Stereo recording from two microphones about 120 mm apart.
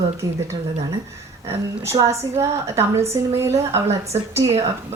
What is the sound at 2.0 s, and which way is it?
A woman's voice, 25° right (ahead or behind).